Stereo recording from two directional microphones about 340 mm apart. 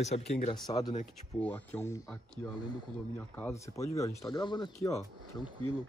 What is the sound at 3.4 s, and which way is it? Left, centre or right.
Speech, centre.